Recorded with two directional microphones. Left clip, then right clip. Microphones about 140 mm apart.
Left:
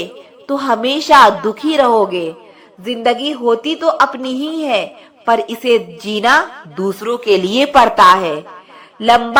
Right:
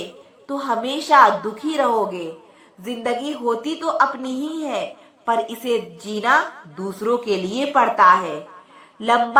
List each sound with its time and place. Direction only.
0.4 s a woman's voice: 35° left (ahead or behind)
9.0 s speech: 30° left (ahead or behind)